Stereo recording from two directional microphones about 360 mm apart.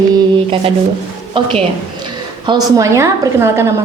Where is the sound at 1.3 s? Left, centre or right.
Centre.